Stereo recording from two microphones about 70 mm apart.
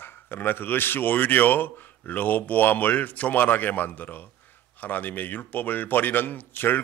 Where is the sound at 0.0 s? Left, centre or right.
Left.